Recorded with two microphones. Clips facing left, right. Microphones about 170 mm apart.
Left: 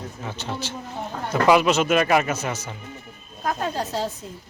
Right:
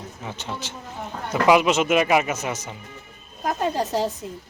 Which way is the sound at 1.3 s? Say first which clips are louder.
Even; 15° right (ahead or behind).